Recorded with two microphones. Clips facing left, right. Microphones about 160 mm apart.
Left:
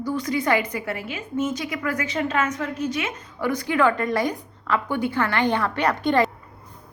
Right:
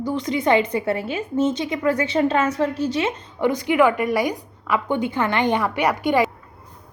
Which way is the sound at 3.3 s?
20° right (ahead or behind).